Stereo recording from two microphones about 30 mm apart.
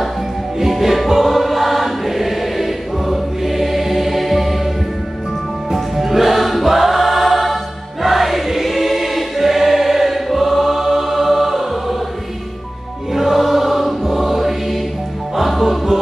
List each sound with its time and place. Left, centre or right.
0.6 s music: centre
5.7 s music: centre
8.0 s choir: centre
13.1 s music: centre
14.0 s choir: centre
15.6 s music: centre